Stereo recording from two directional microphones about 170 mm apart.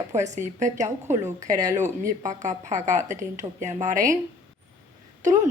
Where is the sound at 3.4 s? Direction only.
45° right (ahead or behind).